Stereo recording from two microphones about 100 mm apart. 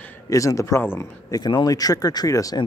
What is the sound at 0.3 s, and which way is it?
Speech, 30° left (ahead or behind).